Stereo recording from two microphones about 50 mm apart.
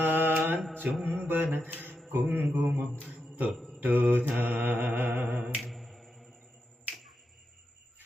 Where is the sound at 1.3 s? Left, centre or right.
Right.